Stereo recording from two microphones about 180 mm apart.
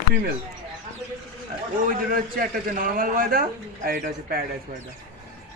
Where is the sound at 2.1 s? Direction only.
50° right (ahead or behind).